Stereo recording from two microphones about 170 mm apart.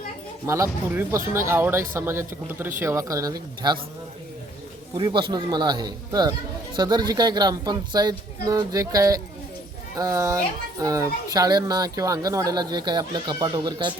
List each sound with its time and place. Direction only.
0.4 s speech: 15° right (ahead or behind)
4.9 s speech: 25° right (ahead or behind)